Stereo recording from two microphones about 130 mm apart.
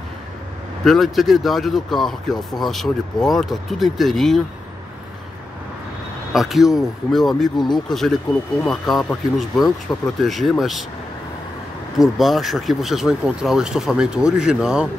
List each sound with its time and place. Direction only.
0.8 s speech: centre (ahead or behind)
6.3 s speech: centre (ahead or behind)
7.5 s speech: 35° left (ahead or behind)
7.9 s speech: centre (ahead or behind)
12.0 s speech: centre (ahead or behind)